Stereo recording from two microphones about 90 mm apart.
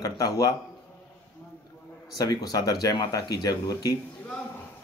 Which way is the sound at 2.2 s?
45° left (ahead or behind).